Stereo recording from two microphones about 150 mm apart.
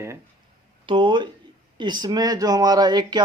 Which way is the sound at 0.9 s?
30° right (ahead or behind).